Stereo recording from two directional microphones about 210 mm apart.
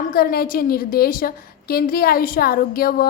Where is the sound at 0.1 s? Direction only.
45° left (ahead or behind).